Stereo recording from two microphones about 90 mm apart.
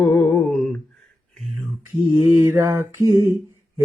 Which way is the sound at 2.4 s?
30° right (ahead or behind).